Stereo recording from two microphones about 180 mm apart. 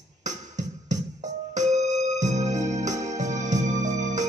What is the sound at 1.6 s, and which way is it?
Keyboard, 40° right (ahead or behind).